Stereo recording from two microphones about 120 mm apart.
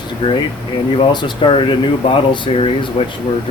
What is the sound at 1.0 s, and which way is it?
Speech, 40° left (ahead or behind).